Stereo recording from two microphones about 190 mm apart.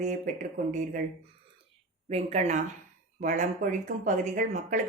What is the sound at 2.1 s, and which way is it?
Speech, 35° right (ahead or behind).